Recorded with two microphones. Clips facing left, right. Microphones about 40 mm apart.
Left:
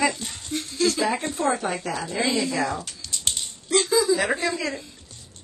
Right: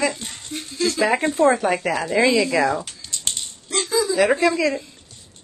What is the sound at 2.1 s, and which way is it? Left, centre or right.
Speech, right.